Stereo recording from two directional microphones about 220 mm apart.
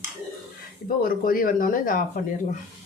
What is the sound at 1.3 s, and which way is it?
Speech, 40° left (ahead or behind).